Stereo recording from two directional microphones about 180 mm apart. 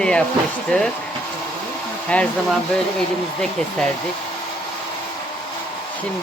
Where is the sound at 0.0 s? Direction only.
5° left (ahead or behind).